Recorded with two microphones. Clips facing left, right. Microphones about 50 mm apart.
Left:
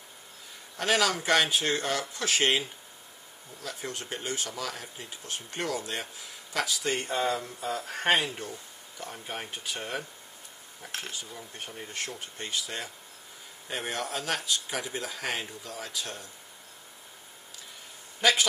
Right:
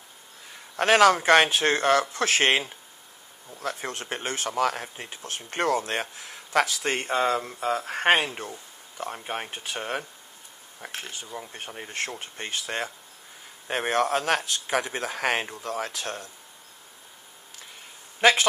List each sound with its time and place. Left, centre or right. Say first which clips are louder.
0.7 s a man's voice: right 8 dB; right
18.2 s a man's voice: right 5 dB; right